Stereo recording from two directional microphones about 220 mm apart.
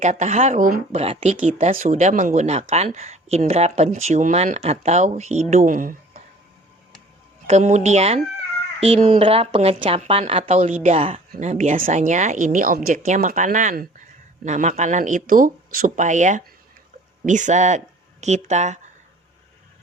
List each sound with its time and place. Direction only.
0.0 s speech: 35° right (ahead or behind)
7.4 s speech: 30° right (ahead or behind)